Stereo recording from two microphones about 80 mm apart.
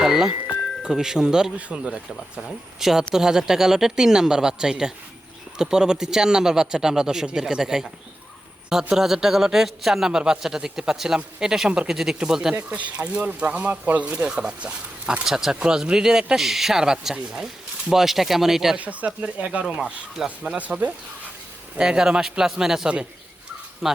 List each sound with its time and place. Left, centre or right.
0.0 s music: centre
0.8 s speech: centre
9.0 s a man's voice: centre
12.5 s a man's voice: centre
18.8 s a man's voice: centre